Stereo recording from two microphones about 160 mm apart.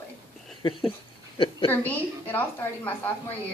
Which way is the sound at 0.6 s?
30° left (ahead or behind).